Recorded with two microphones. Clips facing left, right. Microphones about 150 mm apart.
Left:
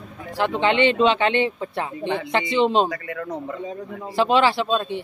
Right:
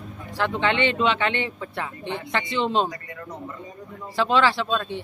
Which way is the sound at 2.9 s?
90° left.